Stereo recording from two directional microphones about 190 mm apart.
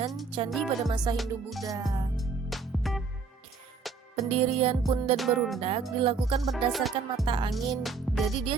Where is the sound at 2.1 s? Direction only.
Centre (ahead or behind).